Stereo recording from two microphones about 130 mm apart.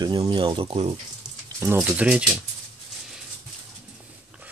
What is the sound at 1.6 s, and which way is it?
Speech, 15° right (ahead or behind).